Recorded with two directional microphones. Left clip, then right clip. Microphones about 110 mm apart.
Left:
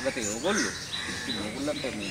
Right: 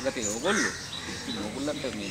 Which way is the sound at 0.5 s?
30° right (ahead or behind).